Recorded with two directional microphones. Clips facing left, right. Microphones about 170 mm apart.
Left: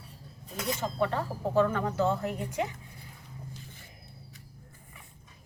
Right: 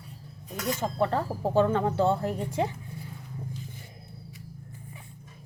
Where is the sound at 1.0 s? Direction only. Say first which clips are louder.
Right 3 dB; 35° right (ahead or behind).